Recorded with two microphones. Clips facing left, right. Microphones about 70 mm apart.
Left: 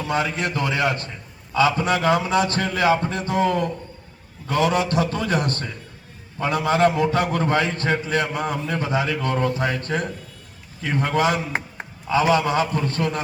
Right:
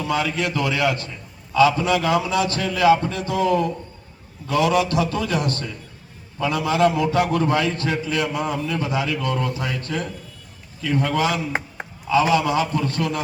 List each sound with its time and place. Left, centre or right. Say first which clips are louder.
0.0 s a man's voice: right 1 dB; left